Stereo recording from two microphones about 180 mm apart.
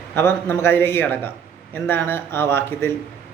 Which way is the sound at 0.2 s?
15° left (ahead or behind).